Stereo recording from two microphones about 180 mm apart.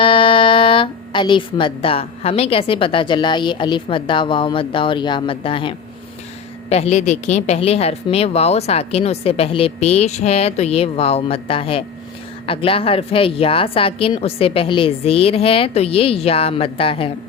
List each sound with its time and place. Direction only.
0.0 s a woman's voice: 30° left (ahead or behind)